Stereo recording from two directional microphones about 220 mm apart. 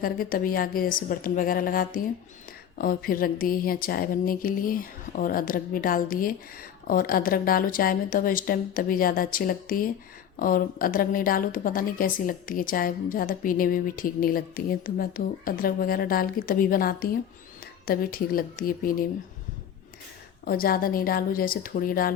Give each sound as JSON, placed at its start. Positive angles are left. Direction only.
{"t": 0.0, "sound": "speech", "side_deg": 40}
{"t": 20.4, "sound": "speech", "side_deg": 40}